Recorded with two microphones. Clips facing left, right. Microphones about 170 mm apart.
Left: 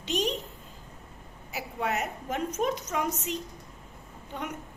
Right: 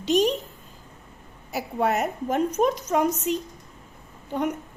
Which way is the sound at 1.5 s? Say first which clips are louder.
Right 7 dB; 40° right (ahead or behind).